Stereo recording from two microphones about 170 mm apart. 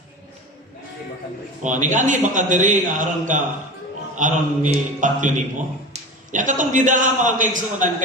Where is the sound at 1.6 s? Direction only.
45° right (ahead or behind).